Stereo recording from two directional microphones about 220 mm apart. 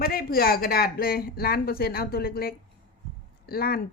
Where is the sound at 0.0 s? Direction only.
45° left (ahead or behind).